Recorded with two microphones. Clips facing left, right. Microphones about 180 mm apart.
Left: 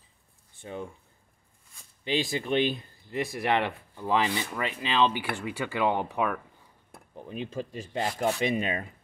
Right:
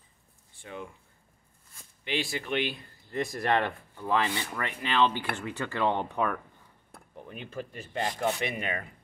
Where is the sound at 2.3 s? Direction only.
20° left (ahead or behind).